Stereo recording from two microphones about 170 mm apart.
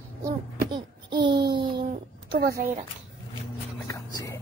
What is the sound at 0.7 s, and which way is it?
Child singing, 25° right (ahead or behind).